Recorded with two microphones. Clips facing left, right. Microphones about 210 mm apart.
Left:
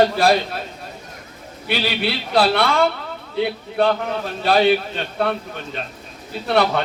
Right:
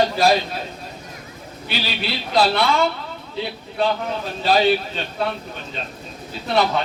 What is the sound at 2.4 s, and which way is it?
Speech, 55° left (ahead or behind).